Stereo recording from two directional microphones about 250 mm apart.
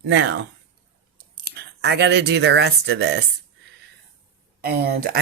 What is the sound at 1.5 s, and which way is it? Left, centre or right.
Speech, right.